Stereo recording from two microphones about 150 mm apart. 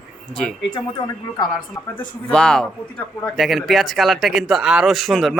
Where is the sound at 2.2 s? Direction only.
5° left (ahead or behind).